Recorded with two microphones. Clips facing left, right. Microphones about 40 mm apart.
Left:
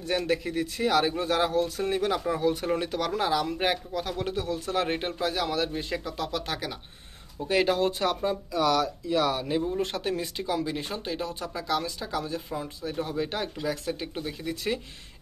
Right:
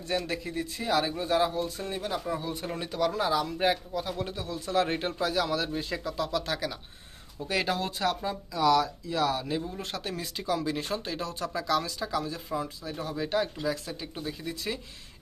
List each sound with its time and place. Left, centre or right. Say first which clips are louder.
0.0 s speech: left 4 dB; left
2.8 s speech: even; left
4.8 s speech: left 1 dB; left
5.9 s speech: right 2 dB; left
8.5 s speech: right 2 dB; left
12.1 s speech: left 1 dB; left
13.1 s speech: right 4 dB; left
13.7 s speech: left 2 dB; left